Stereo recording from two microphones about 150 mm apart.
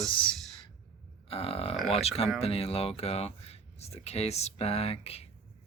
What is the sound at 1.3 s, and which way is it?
Speech, 40° left (ahead or behind).